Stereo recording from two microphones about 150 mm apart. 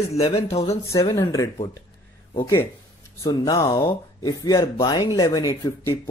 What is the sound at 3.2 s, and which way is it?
Speech, 25° left (ahead or behind).